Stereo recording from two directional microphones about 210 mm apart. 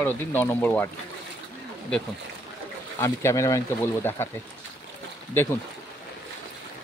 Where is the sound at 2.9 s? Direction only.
15° left (ahead or behind).